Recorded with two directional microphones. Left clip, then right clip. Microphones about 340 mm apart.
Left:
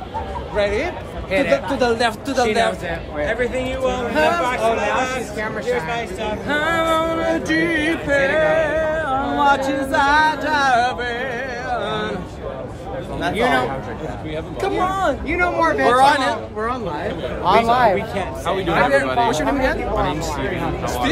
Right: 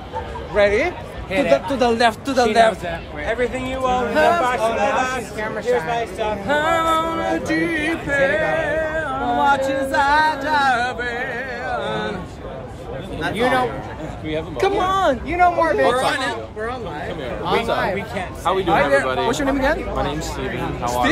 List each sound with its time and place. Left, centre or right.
0.6 s speech: right
4.1 s music: centre
4.4 s speech: centre
6.4 s music: centre
13.3 s speech: centre
14.3 s speech: right
15.2 s music: centre
15.9 s speech: centre
18.4 s speech: centre
19.0 s speech: centre
20.8 s speech: centre